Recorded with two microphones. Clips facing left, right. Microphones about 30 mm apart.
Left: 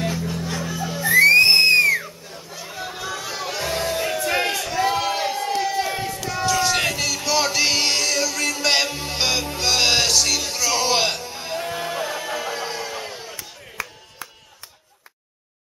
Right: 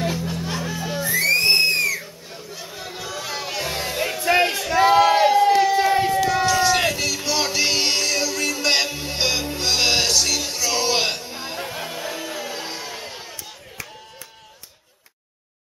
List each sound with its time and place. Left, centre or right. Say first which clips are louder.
0.0 s music: even; centre
1.0 s music: left 6 dB; left
2.7 s a sound: left 4 dB; centre
3.2 s music: right 2 dB; centre
4.3 s a sound: right 6 dB; centre
4.7 s crowd: right 9 dB; centre
5.9 s run: right 9 dB; right
6.2 s run: right 5 dB; centre
6.7 s music: right 1 dB; centre
12.6 s music: left 3 dB; centre
13.1 s a sound: left 1 dB; centre